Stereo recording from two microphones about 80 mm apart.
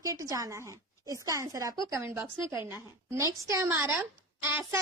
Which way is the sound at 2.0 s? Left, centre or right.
Right.